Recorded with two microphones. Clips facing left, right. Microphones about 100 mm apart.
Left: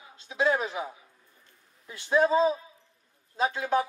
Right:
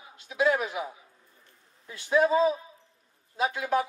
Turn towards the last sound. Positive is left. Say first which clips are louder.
# left 1 dB
turn(degrees=30)  # may be behind; listen again after turning